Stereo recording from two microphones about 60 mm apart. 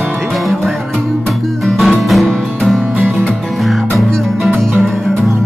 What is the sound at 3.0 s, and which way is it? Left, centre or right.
Music, right.